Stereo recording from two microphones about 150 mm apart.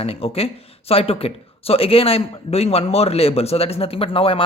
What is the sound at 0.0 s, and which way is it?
Speech, 40° left (ahead or behind).